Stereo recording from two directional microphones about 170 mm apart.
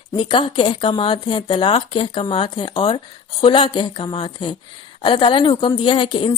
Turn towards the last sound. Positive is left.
turn(degrees=30)  # may be behind; listen again after turning